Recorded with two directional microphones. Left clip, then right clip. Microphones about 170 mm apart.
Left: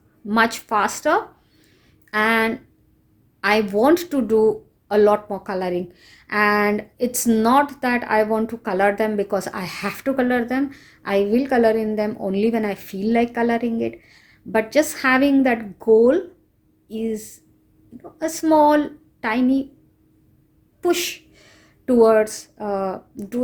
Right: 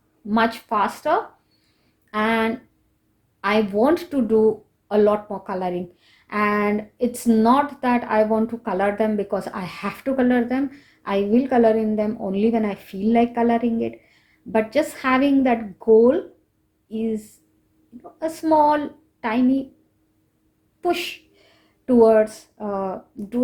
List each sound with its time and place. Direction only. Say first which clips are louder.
0.3 s speech: left 2 dB; 45° left (ahead or behind)
20.8 s a woman's voice: left 2 dB; 40° left (ahead or behind)